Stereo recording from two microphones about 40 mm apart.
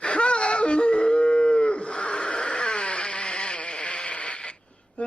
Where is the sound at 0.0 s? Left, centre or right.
Left.